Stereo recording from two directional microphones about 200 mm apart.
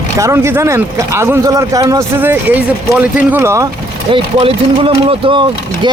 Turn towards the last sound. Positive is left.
turn(degrees=-25)  # may be behind; listen again after turning